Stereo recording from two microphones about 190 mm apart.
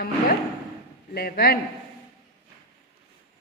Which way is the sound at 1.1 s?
55° left (ahead or behind).